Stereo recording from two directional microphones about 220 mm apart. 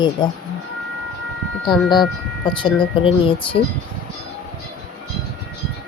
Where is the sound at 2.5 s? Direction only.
20° left (ahead or behind).